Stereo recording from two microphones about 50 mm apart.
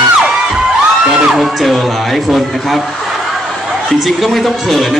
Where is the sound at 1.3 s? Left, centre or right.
Centre.